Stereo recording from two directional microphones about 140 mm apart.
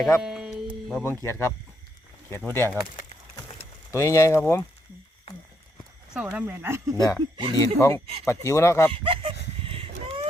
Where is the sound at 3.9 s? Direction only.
20° left (ahead or behind).